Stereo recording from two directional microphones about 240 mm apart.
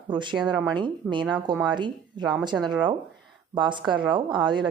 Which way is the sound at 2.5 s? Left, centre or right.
Centre.